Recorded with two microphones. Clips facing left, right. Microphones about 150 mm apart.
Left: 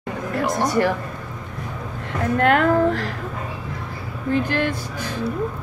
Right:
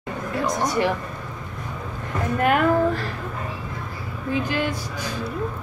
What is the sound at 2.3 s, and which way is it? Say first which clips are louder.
Speech: left 2 dB; 80° left.